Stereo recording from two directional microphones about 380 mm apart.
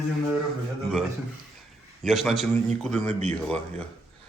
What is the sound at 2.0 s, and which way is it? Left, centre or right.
A man's voice, centre.